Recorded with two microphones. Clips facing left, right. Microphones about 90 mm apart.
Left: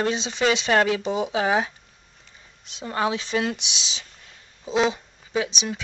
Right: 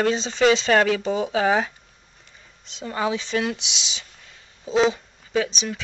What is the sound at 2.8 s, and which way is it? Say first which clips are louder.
Speech: even; 10° left (ahead or behind).